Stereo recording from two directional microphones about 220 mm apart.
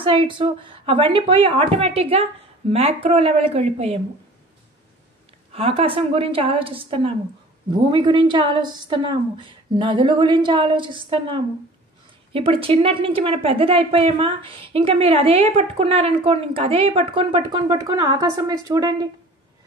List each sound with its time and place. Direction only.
0.0 s a woman's voice: 25° right (ahead or behind)
5.5 s a woman's voice: 25° right (ahead or behind)